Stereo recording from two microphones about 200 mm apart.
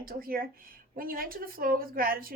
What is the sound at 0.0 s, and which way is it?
A woman's voice, 45° right (ahead or behind).